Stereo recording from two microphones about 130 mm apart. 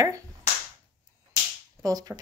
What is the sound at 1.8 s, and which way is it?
Speech, 30° right (ahead or behind).